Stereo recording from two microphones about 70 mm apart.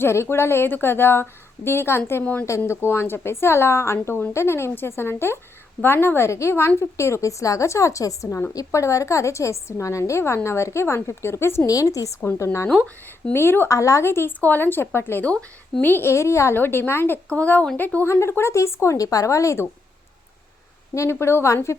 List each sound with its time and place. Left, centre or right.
0.0 s a woman's voice: left
2.2 s speech: left
2.6 s a woman's voice: left
11.6 s a woman's voice: left
12.7 s speech: centre
13.3 s a woman's voice: left
13.7 s a woman's voice: left
15.2 s speech: centre
15.8 s a woman's voice: left
16.6 s a woman's voice: left
17.2 s speech: left
18.1 s a woman's voice: left
20.9 s a woman's voice: left